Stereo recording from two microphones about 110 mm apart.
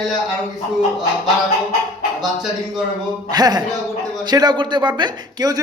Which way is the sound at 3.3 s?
40° right (ahead or behind).